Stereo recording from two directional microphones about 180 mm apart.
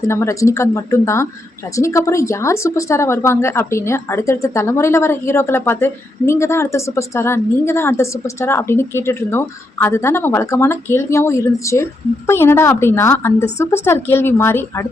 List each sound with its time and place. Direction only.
0.1 s speech: 15° left (ahead or behind)